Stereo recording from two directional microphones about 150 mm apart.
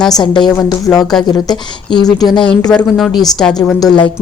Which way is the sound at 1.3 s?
25° left (ahead or behind).